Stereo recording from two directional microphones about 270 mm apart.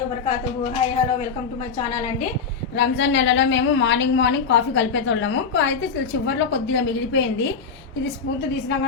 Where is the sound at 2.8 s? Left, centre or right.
Left.